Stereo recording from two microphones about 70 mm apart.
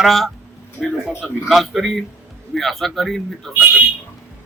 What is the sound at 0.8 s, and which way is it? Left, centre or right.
Speech, left.